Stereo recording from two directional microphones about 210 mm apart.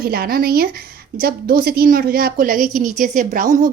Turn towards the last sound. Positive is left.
turn(degrees=-40)  # may be behind; listen again after turning